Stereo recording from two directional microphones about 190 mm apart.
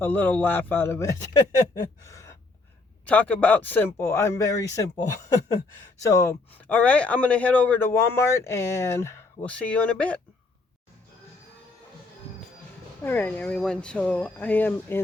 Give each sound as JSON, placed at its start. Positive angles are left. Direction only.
{"t": 0.0, "sound": "speech", "side_deg": 10}
{"t": 2.0, "sound": "gasp", "side_deg": 15}
{"t": 3.1, "sound": "speech", "side_deg": 10}
{"t": 6.0, "sound": "speech", "side_deg": 15}
{"t": 13.0, "sound": "speech", "side_deg": 10}